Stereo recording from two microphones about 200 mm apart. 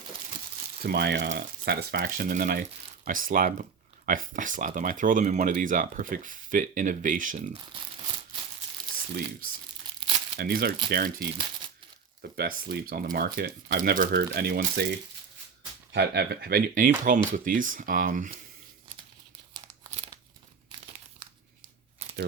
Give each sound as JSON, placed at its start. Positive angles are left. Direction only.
{"t": 0.8, "sound": "speech", "side_deg": -50}
{"t": 10.3, "sound": "speech", "side_deg": -50}
{"t": 12.4, "sound": "speech", "side_deg": -50}
{"t": 19.6, "sound": "crumpling", "side_deg": -30}